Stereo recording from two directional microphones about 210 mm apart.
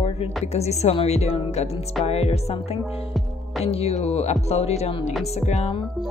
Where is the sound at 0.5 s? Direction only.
30° left (ahead or behind).